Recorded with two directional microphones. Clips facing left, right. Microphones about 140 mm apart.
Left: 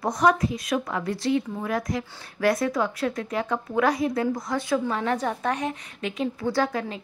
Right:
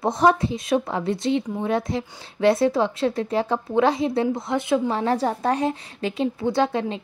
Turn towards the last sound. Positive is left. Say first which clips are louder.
# right 3 dB
turn(degrees=-25)  # may be behind; listen again after turning